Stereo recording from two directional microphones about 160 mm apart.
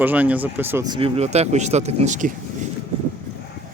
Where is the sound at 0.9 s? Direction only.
35° right (ahead or behind); by 2.6 s 50° right (ahead or behind).